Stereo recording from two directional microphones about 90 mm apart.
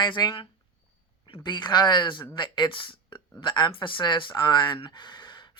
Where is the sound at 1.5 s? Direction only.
55° left (ahead or behind).